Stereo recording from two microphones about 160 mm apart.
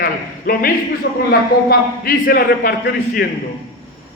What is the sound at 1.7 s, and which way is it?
A man's voice, 65° left (ahead or behind).